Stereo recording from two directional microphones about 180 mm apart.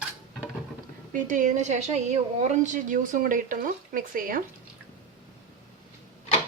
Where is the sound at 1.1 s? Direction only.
45° right (ahead or behind).